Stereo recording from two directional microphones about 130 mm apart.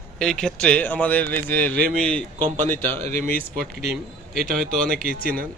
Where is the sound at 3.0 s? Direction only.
75° right (ahead or behind).